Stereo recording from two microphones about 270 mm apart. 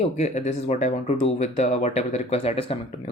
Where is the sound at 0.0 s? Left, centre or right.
Left.